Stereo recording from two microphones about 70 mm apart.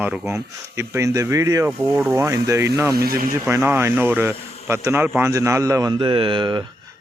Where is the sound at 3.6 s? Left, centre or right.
Right.